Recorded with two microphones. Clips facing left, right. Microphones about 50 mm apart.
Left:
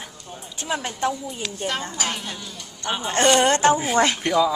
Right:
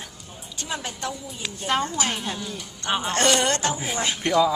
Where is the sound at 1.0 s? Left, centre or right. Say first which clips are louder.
Left 9 dB; left.